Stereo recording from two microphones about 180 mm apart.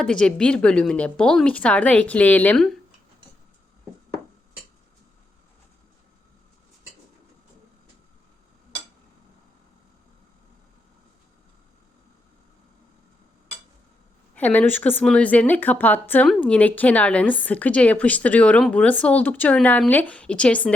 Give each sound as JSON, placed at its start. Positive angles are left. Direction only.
{"t": 0.0, "sound": "speech", "side_deg": 5}
{"t": 14.3, "sound": "a woman's voice", "side_deg": 10}